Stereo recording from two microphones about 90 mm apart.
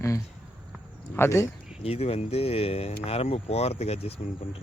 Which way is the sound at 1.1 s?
30° left (ahead or behind).